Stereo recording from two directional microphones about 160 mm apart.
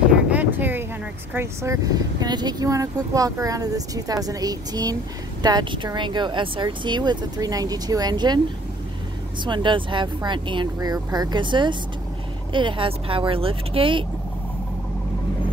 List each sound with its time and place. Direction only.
0.3 s a sound: 10° right (ahead or behind)
1.3 s speech: 15° right (ahead or behind)
9.4 s speech: 30° right (ahead or behind)